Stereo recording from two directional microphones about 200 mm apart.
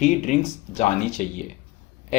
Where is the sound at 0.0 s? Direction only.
40° left (ahead or behind).